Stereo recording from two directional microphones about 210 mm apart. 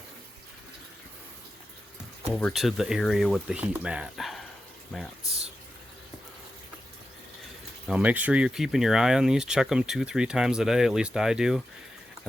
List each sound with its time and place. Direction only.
2.3 s speech: centre (ahead or behind)
7.9 s speech: 5° right (ahead or behind)